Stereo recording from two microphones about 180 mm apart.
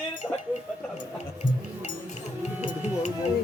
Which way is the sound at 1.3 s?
40° left (ahead or behind).